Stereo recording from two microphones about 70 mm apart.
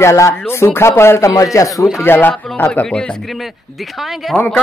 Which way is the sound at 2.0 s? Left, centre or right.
Left.